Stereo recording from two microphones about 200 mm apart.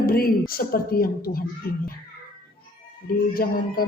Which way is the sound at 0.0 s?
45° left (ahead or behind).